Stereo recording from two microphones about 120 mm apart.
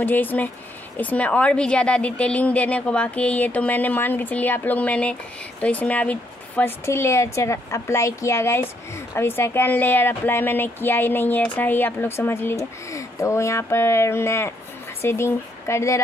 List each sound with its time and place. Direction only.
0.0 s a woman's voice: 15° left (ahead or behind)